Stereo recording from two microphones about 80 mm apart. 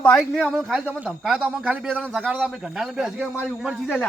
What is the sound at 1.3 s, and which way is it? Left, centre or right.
Speech, centre.